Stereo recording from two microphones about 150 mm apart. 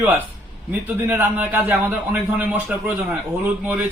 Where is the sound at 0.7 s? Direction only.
10° right (ahead or behind).